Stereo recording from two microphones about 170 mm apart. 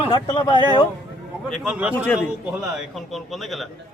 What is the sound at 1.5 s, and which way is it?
A man's voice, 5° right (ahead or behind).